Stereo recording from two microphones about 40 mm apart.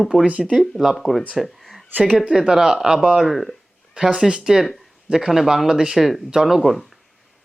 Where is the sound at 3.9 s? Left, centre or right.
Right.